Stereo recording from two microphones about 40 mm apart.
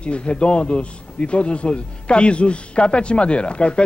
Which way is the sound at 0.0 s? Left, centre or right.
Left.